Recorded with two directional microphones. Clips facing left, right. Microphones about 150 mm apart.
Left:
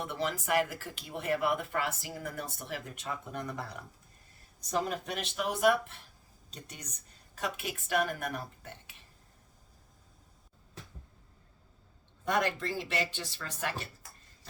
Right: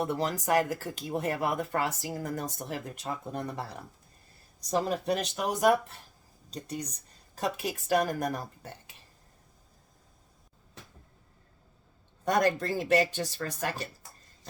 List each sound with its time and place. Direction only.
0.0 s speech: 40° right (ahead or behind)
4.7 s speech: 35° right (ahead or behind)
12.2 s speech: 40° right (ahead or behind)